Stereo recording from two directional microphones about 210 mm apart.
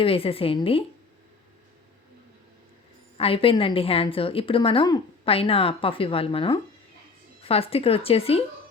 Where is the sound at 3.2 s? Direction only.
25° left (ahead or behind).